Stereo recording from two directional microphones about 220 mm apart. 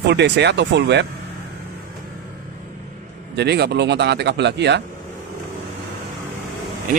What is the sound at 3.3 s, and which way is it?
Speech, 50° right (ahead or behind).